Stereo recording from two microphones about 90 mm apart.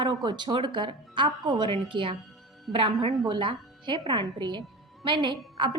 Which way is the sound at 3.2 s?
65° right (ahead or behind).